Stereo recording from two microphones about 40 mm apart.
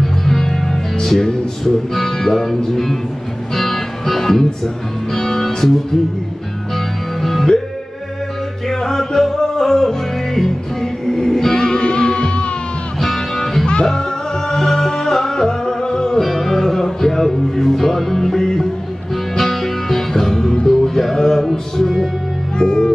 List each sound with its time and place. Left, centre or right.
0.0 s music: centre
7.2 s music: centre
8.6 s music: centre
13.0 s music: centre
22.6 s music: centre